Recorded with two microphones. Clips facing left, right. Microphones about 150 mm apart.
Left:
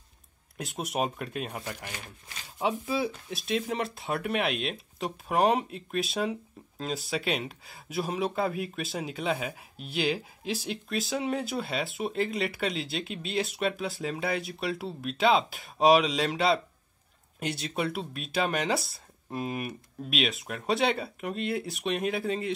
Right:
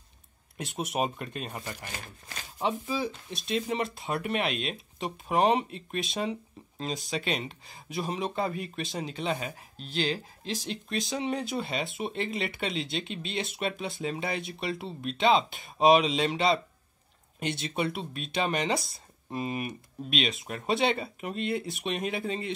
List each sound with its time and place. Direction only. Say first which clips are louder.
0.6 s speech: even; centre (ahead or behind)